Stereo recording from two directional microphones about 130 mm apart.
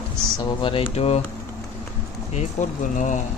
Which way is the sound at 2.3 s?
65° left (ahead or behind).